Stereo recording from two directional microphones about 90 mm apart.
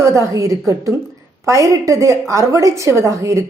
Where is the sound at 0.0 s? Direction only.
35° right (ahead or behind).